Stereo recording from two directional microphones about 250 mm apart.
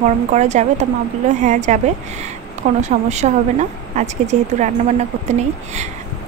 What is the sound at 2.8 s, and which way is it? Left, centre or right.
A woman's voice, right.